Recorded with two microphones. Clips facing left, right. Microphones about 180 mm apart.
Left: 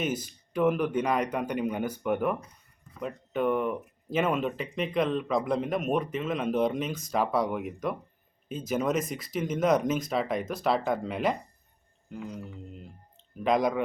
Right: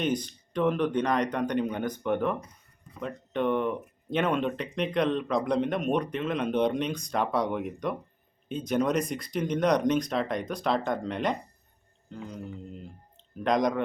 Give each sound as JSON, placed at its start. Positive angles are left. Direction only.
{"t": 0.0, "sound": "speech", "side_deg": 5}